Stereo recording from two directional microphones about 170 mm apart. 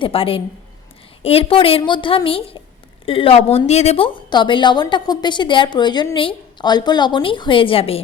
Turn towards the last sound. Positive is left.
turn(degrees=35)  # may be behind; listen again after turning